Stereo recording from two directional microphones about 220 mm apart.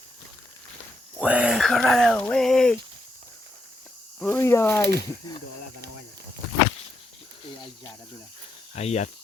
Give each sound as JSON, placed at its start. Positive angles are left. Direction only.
{"t": 1.2, "sound": "speech", "side_deg": -5}
{"t": 4.2, "sound": "speech", "side_deg": 10}
{"t": 8.7, "sound": "speech", "side_deg": 30}